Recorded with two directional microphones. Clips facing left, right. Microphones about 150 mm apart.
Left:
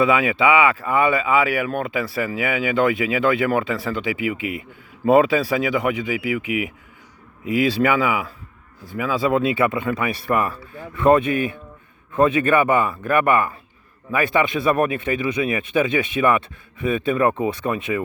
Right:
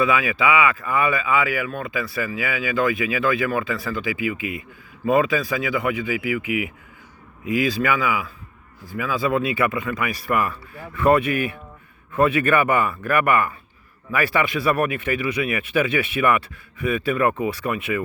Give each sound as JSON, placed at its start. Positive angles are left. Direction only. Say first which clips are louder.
{"t": 0.0, "sound": "speech", "louder": "left 3 dB", "side_deg": 30}
{"t": 7.4, "sound": "speech", "louder": "left 3 dB", "side_deg": 25}